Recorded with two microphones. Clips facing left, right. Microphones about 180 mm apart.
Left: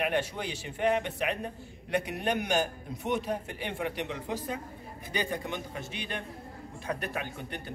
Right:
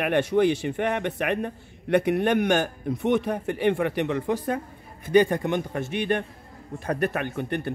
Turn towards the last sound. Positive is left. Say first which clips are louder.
# right 11 dB
turn(degrees=-60)  # may be behind; listen again after turning